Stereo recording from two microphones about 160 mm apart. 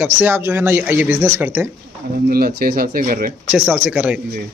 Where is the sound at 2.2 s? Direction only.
70° right (ahead or behind).